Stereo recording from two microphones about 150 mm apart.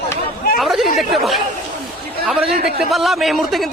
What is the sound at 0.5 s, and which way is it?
Speech, centre (ahead or behind).